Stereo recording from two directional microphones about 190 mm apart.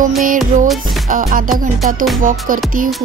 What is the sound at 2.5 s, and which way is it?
Music, 45° right (ahead or behind).